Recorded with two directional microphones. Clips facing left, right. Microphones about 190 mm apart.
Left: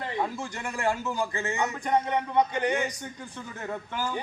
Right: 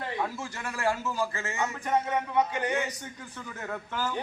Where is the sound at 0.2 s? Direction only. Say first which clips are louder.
Left 2 dB; 15° left (ahead or behind).